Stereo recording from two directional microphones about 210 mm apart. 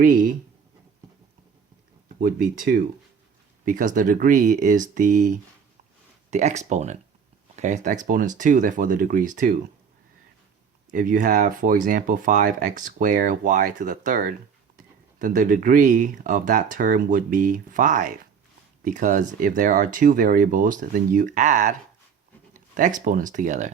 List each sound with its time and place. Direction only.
0.0 s speech: 40° right (ahead or behind)
2.2 s speech: 45° right (ahead or behind)
10.9 s speech: 40° right (ahead or behind)